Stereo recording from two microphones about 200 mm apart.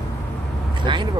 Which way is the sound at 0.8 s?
25° right (ahead or behind).